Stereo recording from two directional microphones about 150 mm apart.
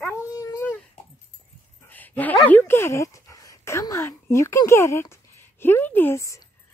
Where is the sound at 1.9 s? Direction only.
10° left (ahead or behind).